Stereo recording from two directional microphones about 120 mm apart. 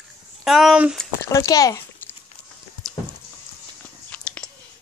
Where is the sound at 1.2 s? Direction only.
25° left (ahead or behind).